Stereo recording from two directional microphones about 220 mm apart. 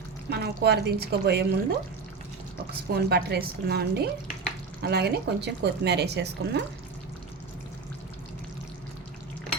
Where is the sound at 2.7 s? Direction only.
45° right (ahead or behind).